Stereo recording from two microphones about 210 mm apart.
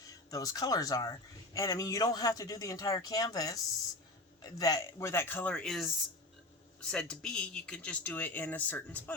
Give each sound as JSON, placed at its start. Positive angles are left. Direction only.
{"t": 0.3, "sound": "speech", "side_deg": 15}
{"t": 6.9, "sound": "speech", "side_deg": 5}